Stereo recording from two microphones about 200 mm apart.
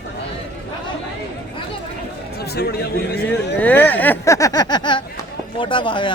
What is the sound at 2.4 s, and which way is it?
Speech, 55° left (ahead or behind).